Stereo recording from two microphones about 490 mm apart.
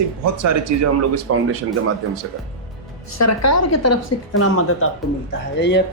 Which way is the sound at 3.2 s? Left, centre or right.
Left.